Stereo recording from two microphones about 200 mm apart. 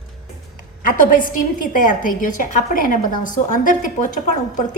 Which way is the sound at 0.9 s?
45° left (ahead or behind).